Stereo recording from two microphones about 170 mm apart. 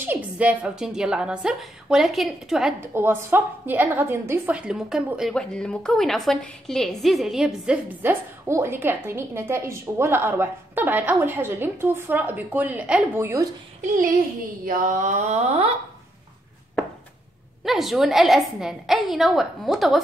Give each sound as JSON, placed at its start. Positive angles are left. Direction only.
{"t": 0.0, "sound": "a woman's voice", "side_deg": -10}
{"t": 2.8, "sound": "a woman's voice", "side_deg": -15}
{"t": 13.7, "sound": "a sound", "side_deg": -50}
{"t": 14.6, "sound": "speech", "side_deg": -50}
{"t": 17.6, "sound": "a woman's voice", "side_deg": 0}